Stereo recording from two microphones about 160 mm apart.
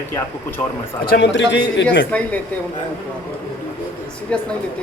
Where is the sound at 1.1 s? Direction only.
90° left.